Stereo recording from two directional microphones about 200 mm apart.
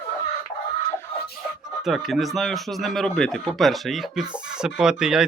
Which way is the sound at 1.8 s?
Centre (ahead or behind).